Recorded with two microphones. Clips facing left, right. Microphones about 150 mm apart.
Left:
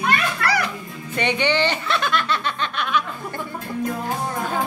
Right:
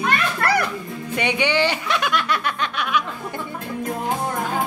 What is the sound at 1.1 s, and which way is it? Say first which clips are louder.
Snicker: even; 10° right (ahead or behind).